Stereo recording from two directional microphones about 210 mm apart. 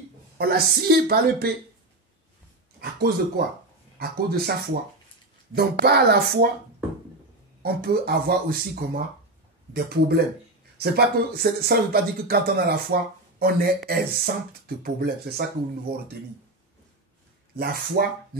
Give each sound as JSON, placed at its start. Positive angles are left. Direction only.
{"t": 0.4, "sound": "speech", "side_deg": -50}
{"t": 2.8, "sound": "speech", "side_deg": -45}
{"t": 7.6, "sound": "speech", "side_deg": -45}
{"t": 18.0, "sound": "speech", "side_deg": -45}